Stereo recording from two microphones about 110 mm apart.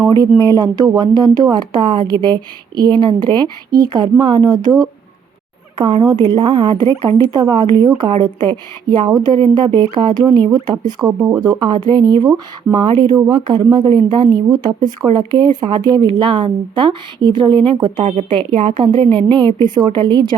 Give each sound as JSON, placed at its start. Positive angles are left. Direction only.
{"t": 0.1, "sound": "speech", "side_deg": -40}
{"t": 5.8, "sound": "speech", "side_deg": -40}
{"t": 18.0, "sound": "a woman's voice", "side_deg": -80}
{"t": 18.3, "sound": "speech", "side_deg": -55}